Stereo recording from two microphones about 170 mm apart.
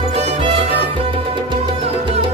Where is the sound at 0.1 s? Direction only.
35° right (ahead or behind).